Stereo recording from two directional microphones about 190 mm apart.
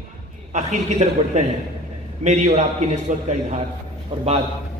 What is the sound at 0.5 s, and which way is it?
A man's voice, 35° right (ahead or behind).